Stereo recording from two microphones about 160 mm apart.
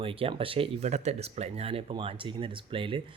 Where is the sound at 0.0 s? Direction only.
35° right (ahead or behind).